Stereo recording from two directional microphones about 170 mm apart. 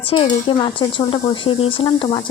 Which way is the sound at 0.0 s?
30° left (ahead or behind).